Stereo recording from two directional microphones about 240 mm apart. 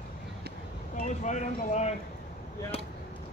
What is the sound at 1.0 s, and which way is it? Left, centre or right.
Speech, left.